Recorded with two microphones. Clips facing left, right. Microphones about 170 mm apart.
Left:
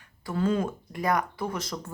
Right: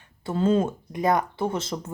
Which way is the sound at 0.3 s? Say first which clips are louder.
Right 4 dB; 25° right (ahead or behind).